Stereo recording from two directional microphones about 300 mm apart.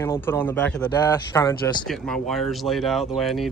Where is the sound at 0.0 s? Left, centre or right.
Centre.